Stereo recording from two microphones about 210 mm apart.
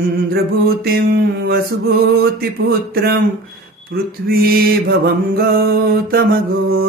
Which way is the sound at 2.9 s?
50° right (ahead or behind).